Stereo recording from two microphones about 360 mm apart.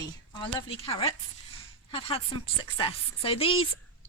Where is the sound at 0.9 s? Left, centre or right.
Centre.